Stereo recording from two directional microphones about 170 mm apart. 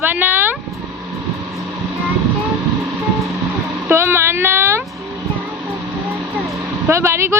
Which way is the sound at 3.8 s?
15° right (ahead or behind).